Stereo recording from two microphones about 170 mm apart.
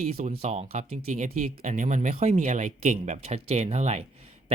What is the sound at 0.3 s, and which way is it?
Speech, 40° right (ahead or behind).